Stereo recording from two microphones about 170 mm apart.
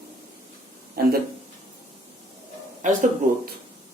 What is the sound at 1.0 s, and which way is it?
Speech, 60° right (ahead or behind).